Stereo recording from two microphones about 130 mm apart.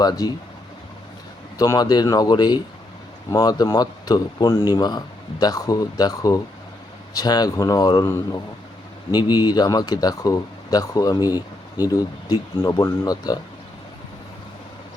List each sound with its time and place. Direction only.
0.0 s speech: 30° left (ahead or behind)
1.5 s speech: 30° left (ahead or behind)